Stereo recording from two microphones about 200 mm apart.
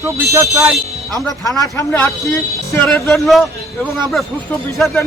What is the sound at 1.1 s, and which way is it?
A man's voice, 15° left (ahead or behind).